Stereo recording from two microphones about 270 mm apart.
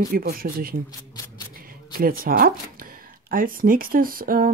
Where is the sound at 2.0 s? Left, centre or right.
Right.